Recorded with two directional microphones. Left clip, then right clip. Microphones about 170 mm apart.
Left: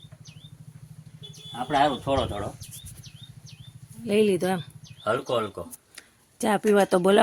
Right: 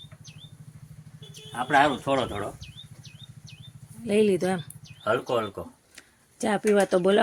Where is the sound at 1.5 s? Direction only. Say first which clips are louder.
Right 2 dB; 5° left (ahead or behind).